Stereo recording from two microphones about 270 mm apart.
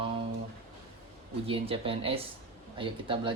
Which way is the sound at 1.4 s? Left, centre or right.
Right.